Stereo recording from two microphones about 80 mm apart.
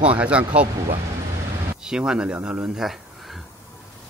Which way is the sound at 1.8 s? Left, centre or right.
Centre.